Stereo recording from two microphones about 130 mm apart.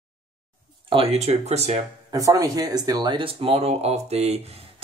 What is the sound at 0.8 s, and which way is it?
Speech, 50° right (ahead or behind).